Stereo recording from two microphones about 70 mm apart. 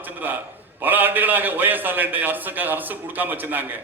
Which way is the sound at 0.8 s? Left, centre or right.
Right.